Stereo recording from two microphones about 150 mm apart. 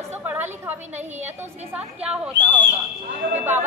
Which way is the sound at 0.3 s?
15° right (ahead or behind).